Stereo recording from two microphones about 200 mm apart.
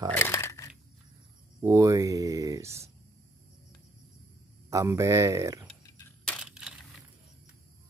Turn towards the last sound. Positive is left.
turn(degrees=-5)  # may be behind; listen again after turning